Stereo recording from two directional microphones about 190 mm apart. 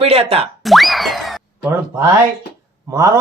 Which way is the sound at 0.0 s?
30° right (ahead or behind).